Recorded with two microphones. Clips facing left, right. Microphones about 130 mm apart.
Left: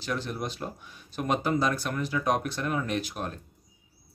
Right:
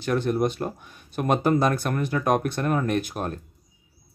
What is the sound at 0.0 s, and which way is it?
Speech, 55° right (ahead or behind).